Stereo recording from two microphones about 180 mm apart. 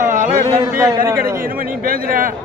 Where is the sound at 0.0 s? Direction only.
45° right (ahead or behind).